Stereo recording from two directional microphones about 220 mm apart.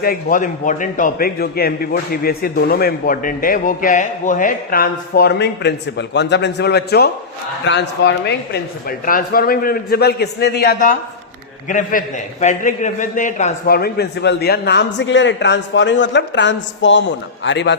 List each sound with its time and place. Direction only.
0.0 s a man's voice: 40° left (ahead or behind)